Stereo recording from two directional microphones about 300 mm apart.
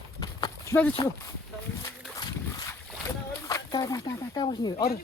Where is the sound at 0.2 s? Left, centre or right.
Centre.